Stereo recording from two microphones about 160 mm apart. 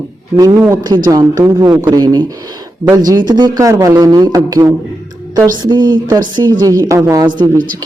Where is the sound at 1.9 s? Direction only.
25° right (ahead or behind).